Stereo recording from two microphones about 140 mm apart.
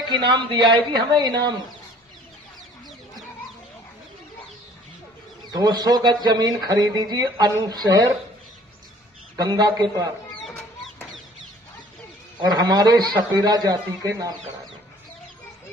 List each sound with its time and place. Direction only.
0.1 s a man's voice: 35° right (ahead or behind)
5.5 s speech: 30° right (ahead or behind)
9.3 s speech: 25° right (ahead or behind)
12.4 s speech: 30° right (ahead or behind)